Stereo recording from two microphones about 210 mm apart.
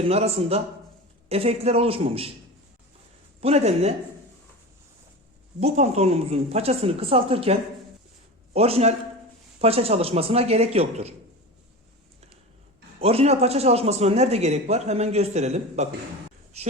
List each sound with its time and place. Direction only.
0.0 s a woman's voice: 30° right (ahead or behind)
3.4 s a man's voice: 30° right (ahead or behind)
5.5 s a woman's voice: 30° right (ahead or behind)
13.0 s a man's voice: 30° right (ahead or behind)